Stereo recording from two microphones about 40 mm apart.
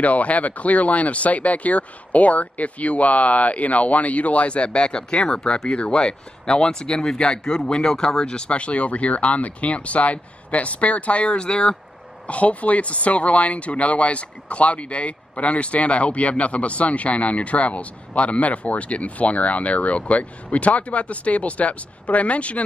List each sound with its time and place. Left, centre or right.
0.0 s speech: left
12.3 s speech: left